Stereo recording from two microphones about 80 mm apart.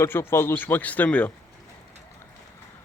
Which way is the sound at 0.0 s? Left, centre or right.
Left.